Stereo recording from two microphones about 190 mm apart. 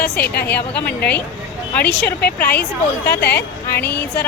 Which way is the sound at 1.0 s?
10° left (ahead or behind).